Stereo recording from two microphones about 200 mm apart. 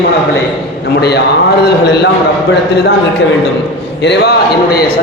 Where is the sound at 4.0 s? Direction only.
55° left (ahead or behind).